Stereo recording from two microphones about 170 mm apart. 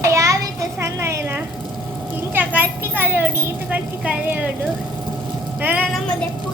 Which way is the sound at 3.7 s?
10° right (ahead or behind).